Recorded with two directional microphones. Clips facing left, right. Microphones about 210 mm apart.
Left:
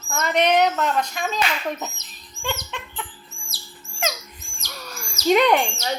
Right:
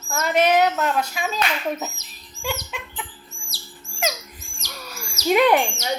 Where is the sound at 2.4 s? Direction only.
5° right (ahead or behind).